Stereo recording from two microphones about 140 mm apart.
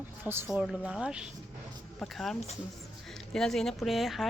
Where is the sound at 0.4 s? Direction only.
Centre (ahead or behind).